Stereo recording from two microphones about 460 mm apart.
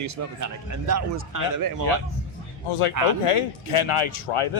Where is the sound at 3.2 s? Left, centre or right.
Left.